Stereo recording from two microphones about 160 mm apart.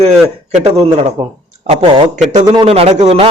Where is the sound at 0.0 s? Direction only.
40° right (ahead or behind).